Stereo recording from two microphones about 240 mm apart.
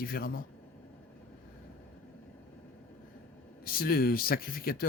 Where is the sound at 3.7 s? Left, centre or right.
Left.